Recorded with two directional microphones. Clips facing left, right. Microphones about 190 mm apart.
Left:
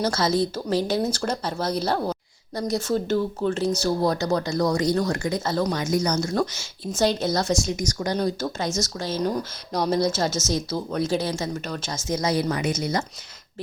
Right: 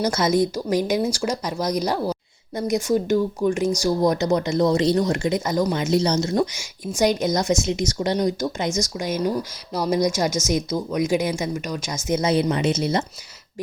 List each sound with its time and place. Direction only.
0.0 s speech: 20° right (ahead or behind)